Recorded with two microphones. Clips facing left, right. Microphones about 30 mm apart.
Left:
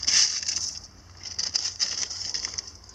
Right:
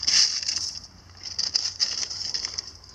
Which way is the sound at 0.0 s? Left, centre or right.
Right.